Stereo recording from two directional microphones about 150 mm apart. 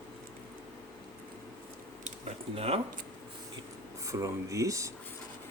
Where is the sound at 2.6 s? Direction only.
40° right (ahead or behind).